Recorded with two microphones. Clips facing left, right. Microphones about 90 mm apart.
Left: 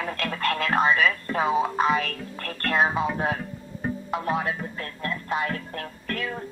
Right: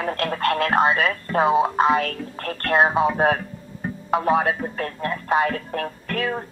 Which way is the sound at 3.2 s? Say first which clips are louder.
Right 7 dB; 70° right (ahead or behind).